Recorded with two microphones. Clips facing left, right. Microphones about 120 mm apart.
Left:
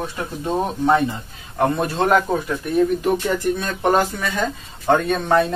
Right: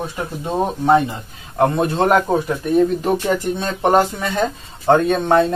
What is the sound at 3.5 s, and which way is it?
Speech, 25° right (ahead or behind).